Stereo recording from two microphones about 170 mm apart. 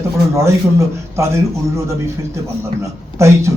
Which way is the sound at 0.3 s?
15° right (ahead or behind).